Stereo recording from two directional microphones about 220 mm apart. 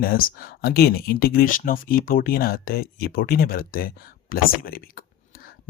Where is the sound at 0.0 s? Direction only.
40° left (ahead or behind).